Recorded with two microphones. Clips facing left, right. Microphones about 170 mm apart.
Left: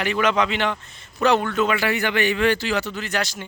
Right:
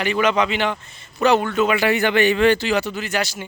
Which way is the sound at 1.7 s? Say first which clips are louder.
Right 4 dB; 20° right (ahead or behind).